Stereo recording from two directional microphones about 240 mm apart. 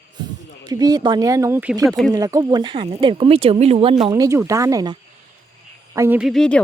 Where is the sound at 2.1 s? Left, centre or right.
Centre.